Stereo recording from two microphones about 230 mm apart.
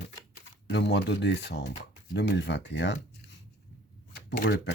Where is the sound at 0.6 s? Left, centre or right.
Left.